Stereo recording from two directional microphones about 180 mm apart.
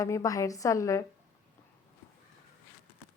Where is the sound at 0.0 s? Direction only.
20° left (ahead or behind).